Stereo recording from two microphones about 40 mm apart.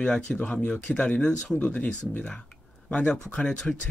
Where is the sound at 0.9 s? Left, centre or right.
Left.